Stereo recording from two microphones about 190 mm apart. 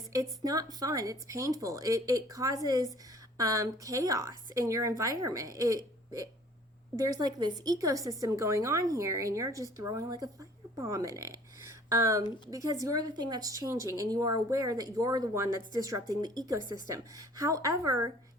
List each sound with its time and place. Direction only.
0.1 s a woman's voice: 20° right (ahead or behind)